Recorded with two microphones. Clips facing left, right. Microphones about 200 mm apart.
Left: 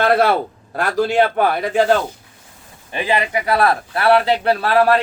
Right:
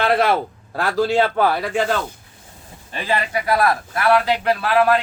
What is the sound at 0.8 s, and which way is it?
A man's voice, 15° left (ahead or behind).